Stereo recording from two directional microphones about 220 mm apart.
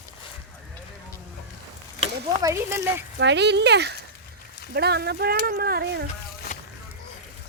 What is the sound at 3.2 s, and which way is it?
Speech, 50° right (ahead or behind).